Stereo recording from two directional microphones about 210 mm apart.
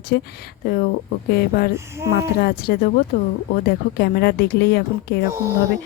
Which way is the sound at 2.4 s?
45° left (ahead or behind).